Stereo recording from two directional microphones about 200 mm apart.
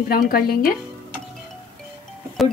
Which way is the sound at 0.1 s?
50° left (ahead or behind).